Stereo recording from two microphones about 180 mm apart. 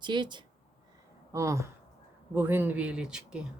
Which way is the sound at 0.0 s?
25° right (ahead or behind).